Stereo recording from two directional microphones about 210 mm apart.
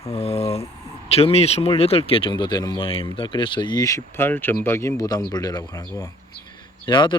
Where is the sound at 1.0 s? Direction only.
30° left (ahead or behind).